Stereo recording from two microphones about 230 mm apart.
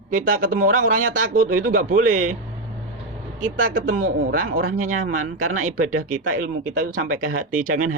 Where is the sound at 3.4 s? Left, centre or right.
Right.